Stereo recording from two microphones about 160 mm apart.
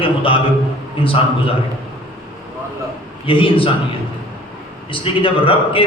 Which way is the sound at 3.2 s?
35° left (ahead or behind).